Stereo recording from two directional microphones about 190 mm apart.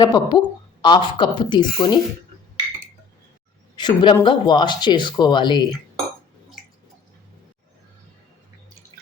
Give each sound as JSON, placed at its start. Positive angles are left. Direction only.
{"t": 0.0, "sound": "speech", "side_deg": 20}
{"t": 3.8, "sound": "speech", "side_deg": 25}